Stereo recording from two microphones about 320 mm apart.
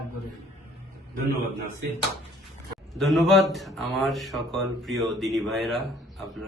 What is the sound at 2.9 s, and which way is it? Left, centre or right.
A man's voice, centre.